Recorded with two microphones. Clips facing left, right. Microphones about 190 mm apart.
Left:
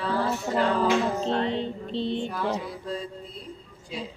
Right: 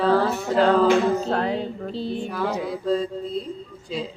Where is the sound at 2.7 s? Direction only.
90° right.